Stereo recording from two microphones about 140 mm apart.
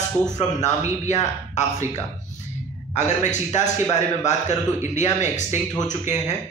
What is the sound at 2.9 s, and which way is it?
A man's voice, 55° left (ahead or behind).